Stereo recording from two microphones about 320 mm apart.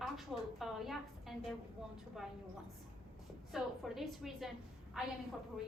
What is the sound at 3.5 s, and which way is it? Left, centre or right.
A woman's voice, centre.